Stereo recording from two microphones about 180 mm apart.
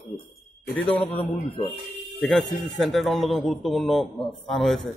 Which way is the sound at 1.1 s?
30° left (ahead or behind).